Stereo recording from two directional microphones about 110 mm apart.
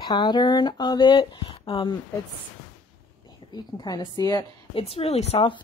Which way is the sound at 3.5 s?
40° left (ahead or behind).